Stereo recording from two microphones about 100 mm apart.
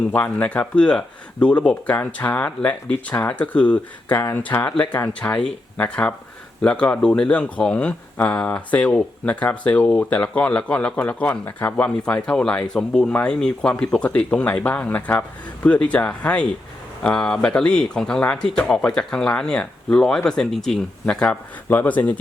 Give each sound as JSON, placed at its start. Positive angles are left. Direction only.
{"t": 0.1, "sound": "speech", "side_deg": 20}